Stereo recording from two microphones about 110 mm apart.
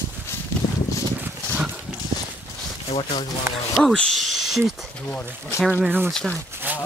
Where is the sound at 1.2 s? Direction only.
15° right (ahead or behind).